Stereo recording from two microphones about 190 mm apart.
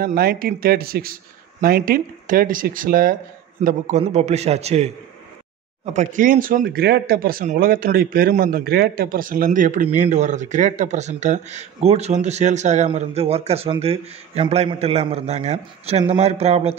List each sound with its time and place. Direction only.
0.0 s speech: 55° right (ahead or behind); by 4.9 s 35° right (ahead or behind)
5.9 s speech: 45° right (ahead or behind)